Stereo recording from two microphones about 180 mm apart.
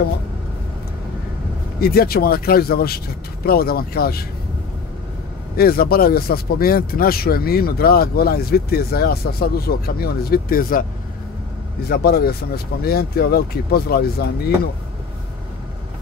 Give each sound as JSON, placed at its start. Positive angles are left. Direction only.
{"t": 1.8, "sound": "speech", "side_deg": 60}
{"t": 5.6, "sound": "speech", "side_deg": 55}
{"t": 11.9, "sound": "speech", "side_deg": 60}